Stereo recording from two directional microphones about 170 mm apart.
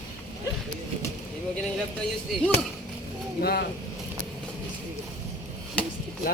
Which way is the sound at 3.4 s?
65° left (ahead or behind).